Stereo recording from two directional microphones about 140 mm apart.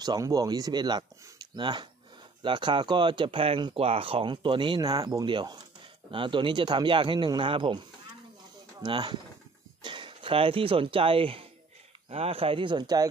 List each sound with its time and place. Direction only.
0.0 s speech: 25° right (ahead or behind)
8.8 s speech: 35° right (ahead or behind)